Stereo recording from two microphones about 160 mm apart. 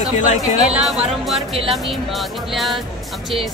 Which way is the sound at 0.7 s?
5° right (ahead or behind).